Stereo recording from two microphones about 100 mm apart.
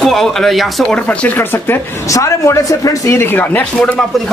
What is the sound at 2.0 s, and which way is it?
Speech, 30° left (ahead or behind).